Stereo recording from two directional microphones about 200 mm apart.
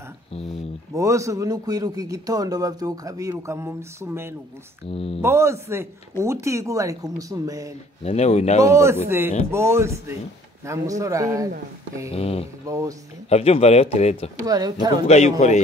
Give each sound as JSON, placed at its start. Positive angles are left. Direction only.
{"t": 0.9, "sound": "a man's voice", "side_deg": -15}
{"t": 4.9, "sound": "speech", "side_deg": 30}
{"t": 5.2, "sound": "a man's voice", "side_deg": -15}
{"t": 8.0, "sound": "speech", "side_deg": 30}
{"t": 8.6, "sound": "a man's voice", "side_deg": -15}
{"t": 12.1, "sound": "speech", "side_deg": 30}
{"t": 12.6, "sound": "a man's voice", "side_deg": -15}
{"t": 13.3, "sound": "speech", "side_deg": 30}
{"t": 14.4, "sound": "speech", "side_deg": -20}
{"t": 15.0, "sound": "speech", "side_deg": 35}